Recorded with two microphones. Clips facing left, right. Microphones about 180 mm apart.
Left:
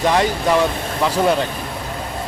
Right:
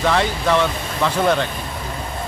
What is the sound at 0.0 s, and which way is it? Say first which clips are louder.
Speech: left 2 dB; 15° left (ahead or behind).